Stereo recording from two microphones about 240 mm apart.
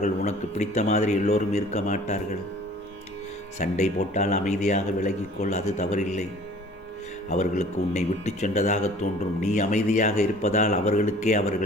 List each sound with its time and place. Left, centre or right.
0.0 s a man's voice: left
3.6 s a man's voice: left
7.3 s a man's voice: left